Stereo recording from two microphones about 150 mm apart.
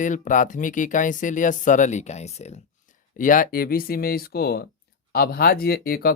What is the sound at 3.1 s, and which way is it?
Speech, 65° left (ahead or behind).